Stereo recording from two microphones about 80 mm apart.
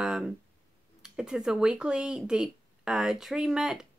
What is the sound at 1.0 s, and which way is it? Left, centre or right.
A woman's voice, centre.